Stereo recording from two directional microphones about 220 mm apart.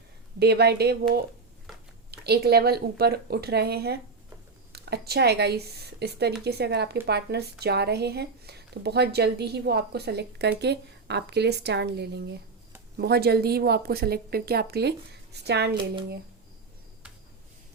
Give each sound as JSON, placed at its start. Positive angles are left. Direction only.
{"t": 0.3, "sound": "speech", "side_deg": -50}
{"t": 2.0, "sound": "speech", "side_deg": -45}